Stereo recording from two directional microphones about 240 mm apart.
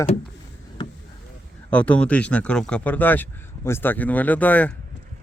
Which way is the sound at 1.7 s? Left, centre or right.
Centre.